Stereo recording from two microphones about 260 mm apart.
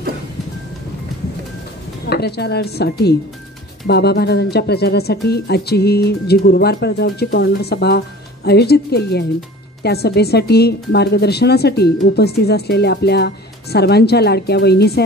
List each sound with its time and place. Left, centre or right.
2.0 s a woman's voice: left